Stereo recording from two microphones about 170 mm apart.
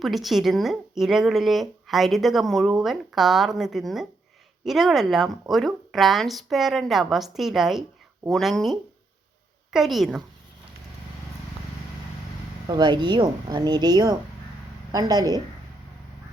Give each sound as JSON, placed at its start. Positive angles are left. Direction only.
{"t": 0.0, "sound": "a woman's voice", "side_deg": 0}
{"t": 12.6, "sound": "speech", "side_deg": -25}